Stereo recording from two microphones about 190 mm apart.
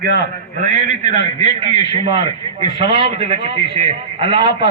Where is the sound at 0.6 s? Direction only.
40° right (ahead or behind).